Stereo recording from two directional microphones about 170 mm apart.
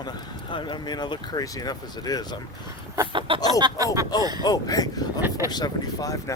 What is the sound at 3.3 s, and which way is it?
Speech, 20° left (ahead or behind).